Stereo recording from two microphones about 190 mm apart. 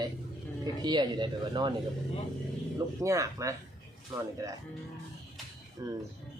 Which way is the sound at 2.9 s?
15° right (ahead or behind).